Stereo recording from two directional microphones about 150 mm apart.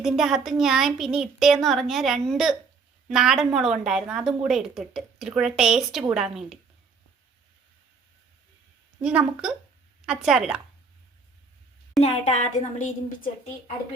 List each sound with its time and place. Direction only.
0.0 s a woman's voice: 5° right (ahead or behind)
9.0 s a woman's voice: 5° right (ahead or behind)
12.0 s a woman's voice: 55° left (ahead or behind)